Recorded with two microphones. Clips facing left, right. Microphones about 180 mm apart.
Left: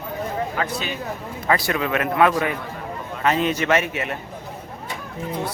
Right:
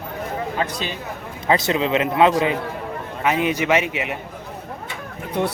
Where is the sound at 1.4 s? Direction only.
20° right (ahead or behind).